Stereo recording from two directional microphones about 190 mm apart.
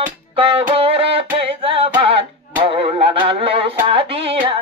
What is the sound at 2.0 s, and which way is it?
Music, 30° right (ahead or behind).